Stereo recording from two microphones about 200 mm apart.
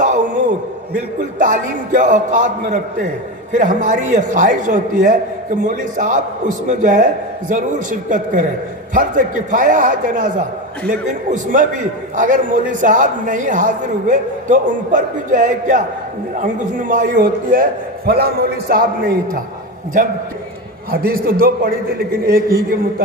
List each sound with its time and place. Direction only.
0.0 s a sound: 40° right (ahead or behind)
1.4 s a man's voice: 40° right (ahead or behind)
20.9 s a man's voice: 50° right (ahead or behind)